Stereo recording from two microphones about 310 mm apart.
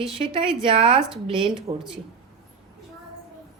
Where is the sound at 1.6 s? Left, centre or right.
Centre.